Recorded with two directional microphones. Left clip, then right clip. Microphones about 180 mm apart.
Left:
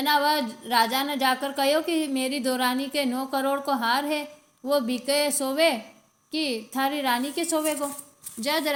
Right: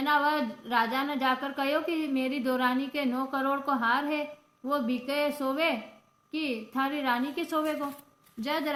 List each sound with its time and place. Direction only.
0.0 s speech: 35° left (ahead or behind)